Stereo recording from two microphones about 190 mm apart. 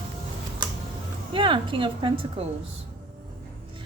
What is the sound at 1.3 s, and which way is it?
Speech, 25° right (ahead or behind).